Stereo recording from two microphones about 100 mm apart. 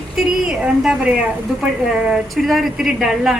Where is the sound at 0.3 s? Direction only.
5° right (ahead or behind).